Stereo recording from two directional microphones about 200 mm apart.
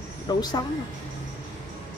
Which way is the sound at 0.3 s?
20° left (ahead or behind).